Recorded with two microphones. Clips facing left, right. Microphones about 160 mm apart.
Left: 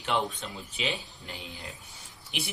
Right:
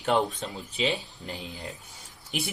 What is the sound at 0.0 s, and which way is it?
Speech, 45° right (ahead or behind).